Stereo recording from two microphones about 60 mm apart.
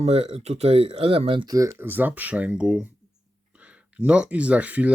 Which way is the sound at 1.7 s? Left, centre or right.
Right.